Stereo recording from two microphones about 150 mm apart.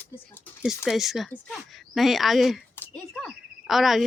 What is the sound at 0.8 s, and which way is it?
Speech, centre (ahead or behind).